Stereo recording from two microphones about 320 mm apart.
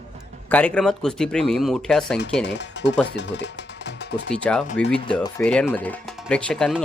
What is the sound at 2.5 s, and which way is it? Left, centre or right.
Speech, left.